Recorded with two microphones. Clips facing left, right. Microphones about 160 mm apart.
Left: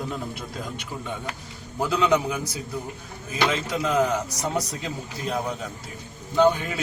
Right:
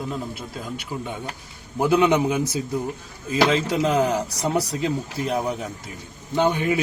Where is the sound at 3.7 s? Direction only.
30° right (ahead or behind).